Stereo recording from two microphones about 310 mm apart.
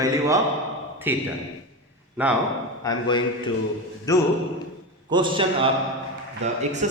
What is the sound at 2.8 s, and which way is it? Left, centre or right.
Speech, centre.